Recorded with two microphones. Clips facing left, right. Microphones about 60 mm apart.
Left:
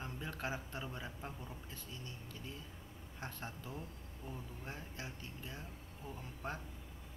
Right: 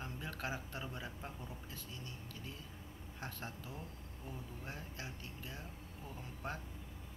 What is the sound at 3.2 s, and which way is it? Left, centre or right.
Speech, centre.